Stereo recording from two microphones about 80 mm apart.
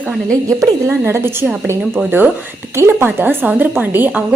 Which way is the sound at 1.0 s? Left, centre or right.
Right.